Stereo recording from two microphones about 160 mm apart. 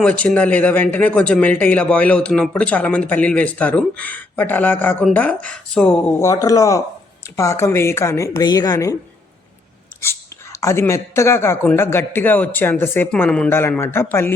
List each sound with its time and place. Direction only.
0.0 s speech: 5° left (ahead or behind)
6.1 s a woman's voice: 20° left (ahead or behind)
10.0 s speech: 15° left (ahead or behind)